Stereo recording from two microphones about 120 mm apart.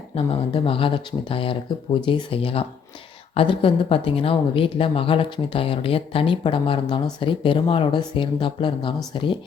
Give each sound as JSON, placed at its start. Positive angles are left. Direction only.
{"t": 0.2, "sound": "speech", "side_deg": 50}